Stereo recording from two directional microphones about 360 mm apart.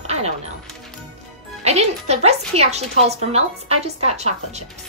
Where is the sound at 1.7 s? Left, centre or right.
Centre.